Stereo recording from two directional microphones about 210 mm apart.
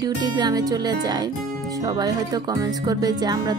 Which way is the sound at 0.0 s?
20° right (ahead or behind).